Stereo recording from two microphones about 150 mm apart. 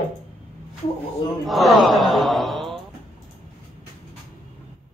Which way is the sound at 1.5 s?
Centre (ahead or behind).